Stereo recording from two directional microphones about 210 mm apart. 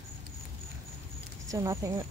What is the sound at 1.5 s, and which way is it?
Speech, 15° right (ahead or behind).